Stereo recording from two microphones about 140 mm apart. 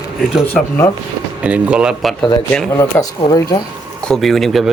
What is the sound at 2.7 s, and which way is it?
Speech, 20° left (ahead or behind).